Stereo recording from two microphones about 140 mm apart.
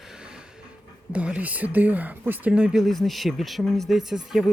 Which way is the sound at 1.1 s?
10° right (ahead or behind).